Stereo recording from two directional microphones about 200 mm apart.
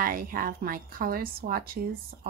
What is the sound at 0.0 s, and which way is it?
Speech, 45° right (ahead or behind).